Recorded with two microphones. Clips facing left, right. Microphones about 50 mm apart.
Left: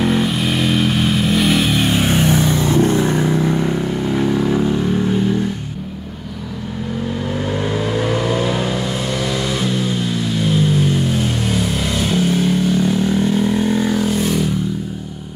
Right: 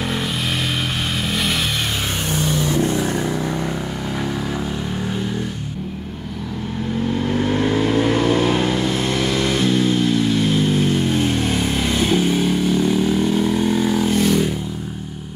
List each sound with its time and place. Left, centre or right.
0.0 s vehicle: centre
2.3 s vehicle: left; by 4.8 s centre
12.0 s vehicle: centre